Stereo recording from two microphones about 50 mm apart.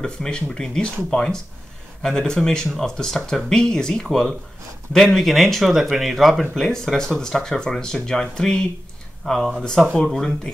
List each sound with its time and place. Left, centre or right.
0.0 s speech: centre
5.0 s speech: centre
6.5 s speech: centre